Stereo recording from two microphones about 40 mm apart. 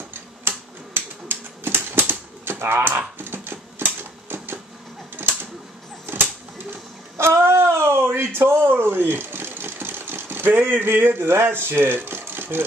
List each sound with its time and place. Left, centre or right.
0.1 s typewriter: right
2.6 s speech: right
3.2 s a sound: right
6.1 s typewriter: right
7.2 s a sound: right
10.6 s speech: right